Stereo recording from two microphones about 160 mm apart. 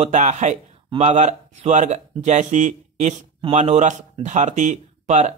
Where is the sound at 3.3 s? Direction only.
35° right (ahead or behind).